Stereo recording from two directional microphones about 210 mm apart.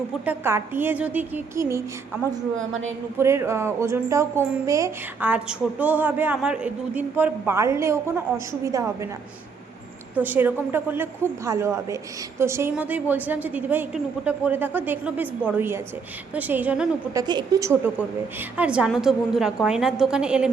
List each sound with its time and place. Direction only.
0.3 s speech: 10° right (ahead or behind)
3.2 s speech: 15° right (ahead or behind)
10.2 s speech: 10° right (ahead or behind)
17.2 s a woman's voice: 20° right (ahead or behind)